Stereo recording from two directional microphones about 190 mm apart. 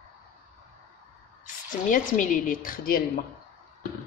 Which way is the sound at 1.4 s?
45° left (ahead or behind).